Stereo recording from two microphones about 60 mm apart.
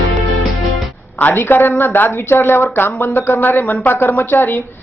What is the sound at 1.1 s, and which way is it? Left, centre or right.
Speech, left.